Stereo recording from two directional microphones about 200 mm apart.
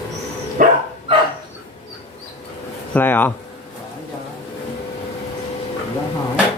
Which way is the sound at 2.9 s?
10° left (ahead or behind).